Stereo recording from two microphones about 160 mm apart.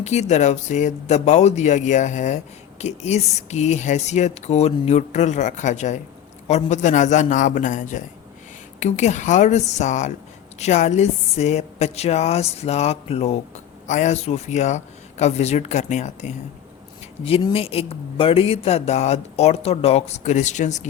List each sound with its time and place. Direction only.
0.0 s speech: 45° left (ahead or behind)
17.5 s speech: 35° left (ahead or behind)